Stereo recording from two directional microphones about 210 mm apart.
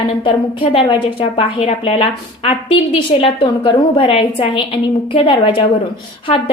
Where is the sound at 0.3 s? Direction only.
25° left (ahead or behind).